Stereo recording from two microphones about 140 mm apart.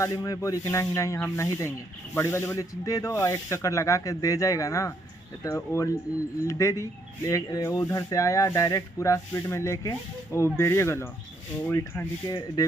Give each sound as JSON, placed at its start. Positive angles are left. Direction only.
{"t": 0.0, "sound": "speech", "side_deg": 25}
{"t": 12.3, "sound": "speech", "side_deg": 30}